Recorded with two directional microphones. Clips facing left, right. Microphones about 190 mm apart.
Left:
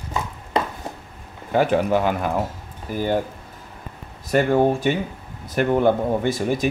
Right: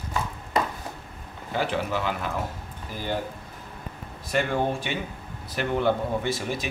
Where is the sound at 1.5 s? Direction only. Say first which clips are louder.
Left 9 dB; 50° left (ahead or behind).